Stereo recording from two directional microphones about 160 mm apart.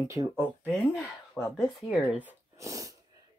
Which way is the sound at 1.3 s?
20° left (ahead or behind).